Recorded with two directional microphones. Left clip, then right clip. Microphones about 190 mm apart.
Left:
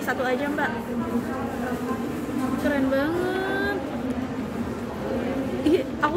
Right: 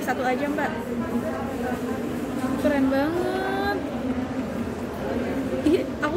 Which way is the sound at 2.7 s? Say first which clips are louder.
Left 1 dB; 5° right (ahead or behind).